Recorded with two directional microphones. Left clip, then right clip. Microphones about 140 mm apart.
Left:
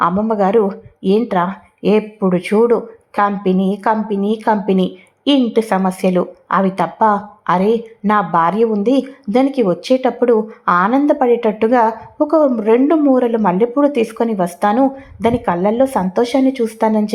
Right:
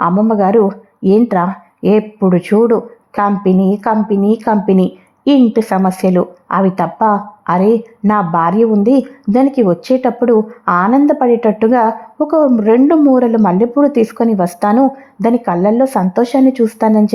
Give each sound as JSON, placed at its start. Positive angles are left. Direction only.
{"t": 0.0, "sound": "speech", "side_deg": -25}